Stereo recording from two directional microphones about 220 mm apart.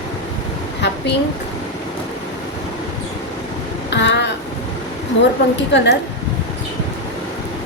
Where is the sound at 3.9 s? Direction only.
50° left (ahead or behind).